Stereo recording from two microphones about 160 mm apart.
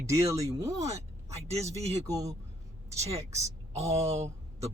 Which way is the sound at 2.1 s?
20° right (ahead or behind).